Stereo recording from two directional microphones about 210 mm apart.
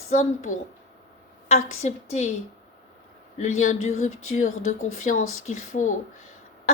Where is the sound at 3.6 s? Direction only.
35° left (ahead or behind).